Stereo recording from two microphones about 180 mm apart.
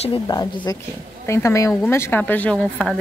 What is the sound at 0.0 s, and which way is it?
A woman's voice, 25° left (ahead or behind).